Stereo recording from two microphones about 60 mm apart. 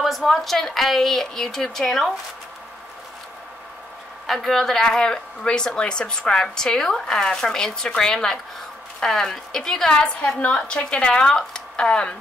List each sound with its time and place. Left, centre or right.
0.0 s a woman's voice: centre
4.3 s a woman's voice: centre